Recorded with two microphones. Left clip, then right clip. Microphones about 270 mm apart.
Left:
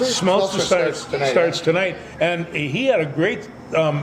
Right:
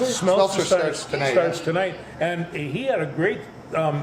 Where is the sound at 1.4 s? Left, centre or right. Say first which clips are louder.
Left 4 dB; left.